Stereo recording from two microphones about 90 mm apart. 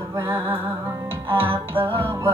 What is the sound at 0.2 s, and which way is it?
Music, 70° right (ahead or behind).